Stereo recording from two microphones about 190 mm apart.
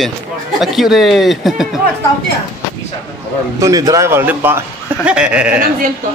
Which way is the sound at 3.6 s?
20° right (ahead or behind).